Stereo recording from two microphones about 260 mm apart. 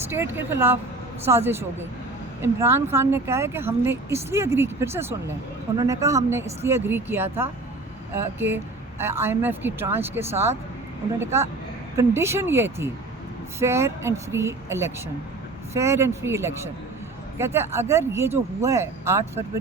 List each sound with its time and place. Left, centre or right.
0.1 s speech: centre